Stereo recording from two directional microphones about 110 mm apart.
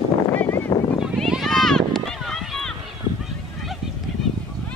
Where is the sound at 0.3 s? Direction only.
20° left (ahead or behind).